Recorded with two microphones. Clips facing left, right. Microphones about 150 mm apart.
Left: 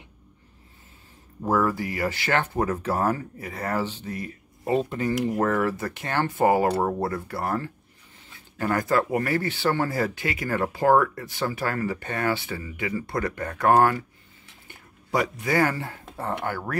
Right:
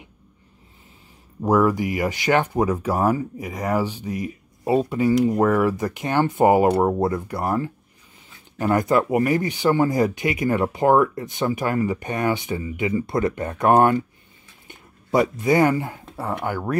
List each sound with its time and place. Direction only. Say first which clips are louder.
1.4 s speech: right 5 dB; 15° right (ahead or behind)